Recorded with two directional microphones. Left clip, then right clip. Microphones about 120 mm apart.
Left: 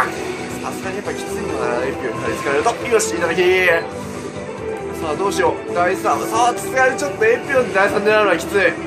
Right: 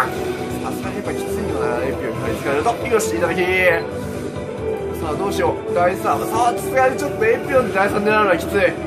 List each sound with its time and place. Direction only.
1.6 s music: 20° left (ahead or behind)
2.5 s speech: 20° left (ahead or behind)
5.4 s speech: 20° left (ahead or behind)